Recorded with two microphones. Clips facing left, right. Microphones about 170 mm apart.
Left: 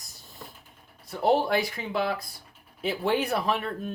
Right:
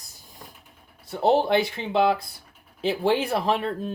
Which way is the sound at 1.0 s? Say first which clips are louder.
Right 3 dB; 25° right (ahead or behind).